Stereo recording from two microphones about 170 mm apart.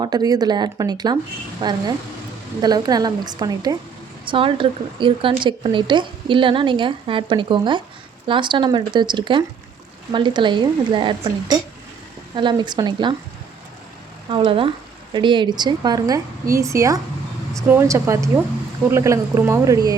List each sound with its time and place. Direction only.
0.0 s speech: 25° right (ahead or behind)
12.4 s speech: 25° right (ahead or behind)
14.3 s speech: 30° right (ahead or behind)